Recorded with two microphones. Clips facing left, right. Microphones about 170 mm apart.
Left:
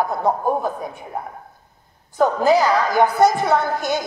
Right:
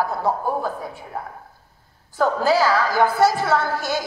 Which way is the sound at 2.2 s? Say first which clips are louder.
Left 3 dB; 20° left (ahead or behind).